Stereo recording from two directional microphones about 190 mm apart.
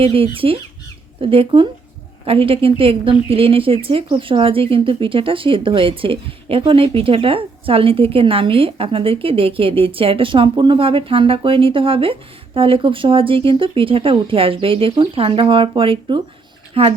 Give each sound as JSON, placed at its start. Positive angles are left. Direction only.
{"t": 0.0, "sound": "a woman's voice", "side_deg": -30}